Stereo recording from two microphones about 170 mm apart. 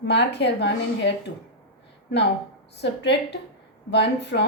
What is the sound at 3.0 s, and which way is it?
A woman's voice, 85° left.